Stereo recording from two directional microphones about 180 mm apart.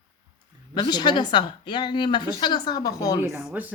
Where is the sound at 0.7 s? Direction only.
25° left (ahead or behind).